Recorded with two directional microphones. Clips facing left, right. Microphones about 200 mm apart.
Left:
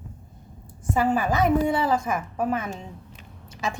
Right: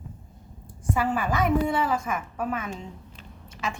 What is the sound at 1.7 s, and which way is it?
A woman's voice, 35° left (ahead or behind).